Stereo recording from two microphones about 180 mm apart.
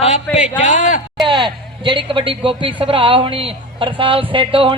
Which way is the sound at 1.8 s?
30° right (ahead or behind).